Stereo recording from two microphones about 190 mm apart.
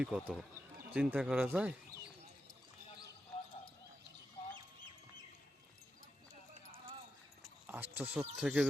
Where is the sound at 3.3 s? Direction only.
30° left (ahead or behind).